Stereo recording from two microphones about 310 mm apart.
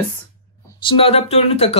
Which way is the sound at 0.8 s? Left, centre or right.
Centre.